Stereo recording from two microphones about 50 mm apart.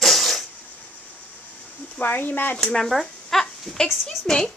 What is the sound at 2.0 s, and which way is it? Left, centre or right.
Speech, left.